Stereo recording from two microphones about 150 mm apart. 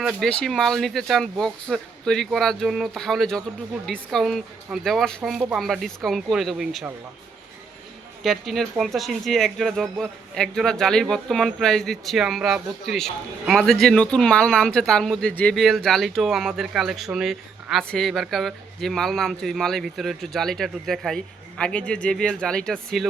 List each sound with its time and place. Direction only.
0.0 s speech: 5° right (ahead or behind)
8.2 s speech: centre (ahead or behind)